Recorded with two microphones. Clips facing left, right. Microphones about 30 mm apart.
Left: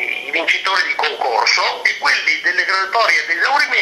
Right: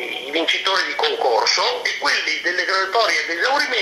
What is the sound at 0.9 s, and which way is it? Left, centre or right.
Speech, left.